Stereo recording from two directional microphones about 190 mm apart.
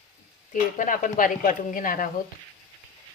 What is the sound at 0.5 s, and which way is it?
Speech, 45° left (ahead or behind).